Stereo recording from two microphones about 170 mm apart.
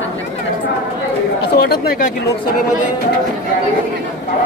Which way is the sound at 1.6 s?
60° left (ahead or behind).